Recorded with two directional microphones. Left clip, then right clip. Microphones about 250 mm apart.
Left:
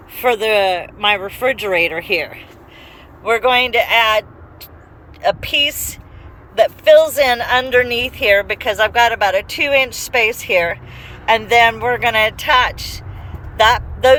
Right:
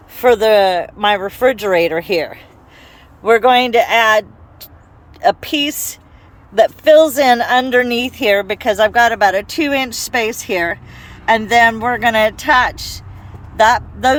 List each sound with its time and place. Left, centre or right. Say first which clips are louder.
0.2 s speech: right 4 dB; right